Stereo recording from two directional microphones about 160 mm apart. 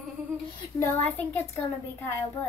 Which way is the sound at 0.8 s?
15° left (ahead or behind).